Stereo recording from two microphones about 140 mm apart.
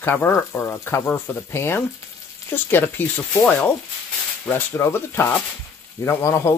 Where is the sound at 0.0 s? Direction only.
15° left (ahead or behind).